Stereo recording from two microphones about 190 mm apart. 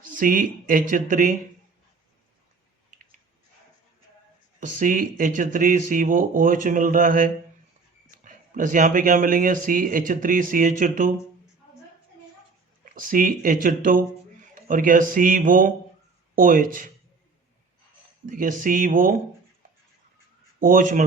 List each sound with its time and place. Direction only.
0.1 s speech: 45° right (ahead or behind)
4.6 s speech: 45° right (ahead or behind)
12.8 s speech: 45° right (ahead or behind)
18.3 s speech: 45° right (ahead or behind)
20.6 s speech: 45° right (ahead or behind)